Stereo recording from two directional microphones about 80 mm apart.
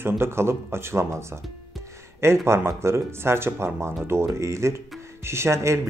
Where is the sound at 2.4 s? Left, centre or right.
Right.